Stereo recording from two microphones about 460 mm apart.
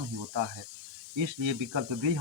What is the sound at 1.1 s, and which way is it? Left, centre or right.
Speech, right.